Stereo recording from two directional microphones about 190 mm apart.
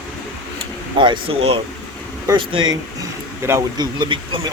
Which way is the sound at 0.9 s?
25° right (ahead or behind).